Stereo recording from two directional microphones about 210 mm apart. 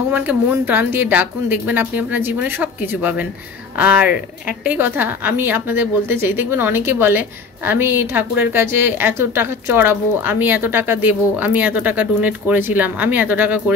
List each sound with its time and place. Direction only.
0.1 s a woman's voice: 10° right (ahead or behind)